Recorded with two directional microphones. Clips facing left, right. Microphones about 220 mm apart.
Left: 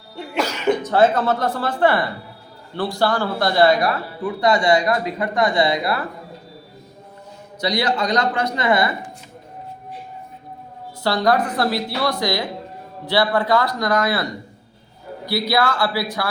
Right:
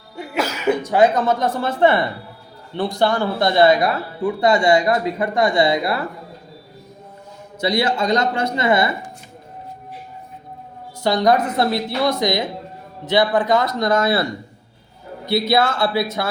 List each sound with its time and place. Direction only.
0.2 s a man's voice: 5° right (ahead or behind); by 6.0 s 25° right (ahead or behind)
7.6 s a man's voice: 25° right (ahead or behind)
11.0 s a man's voice: 20° right (ahead or behind)
15.3 s a man's voice: 25° right (ahead or behind)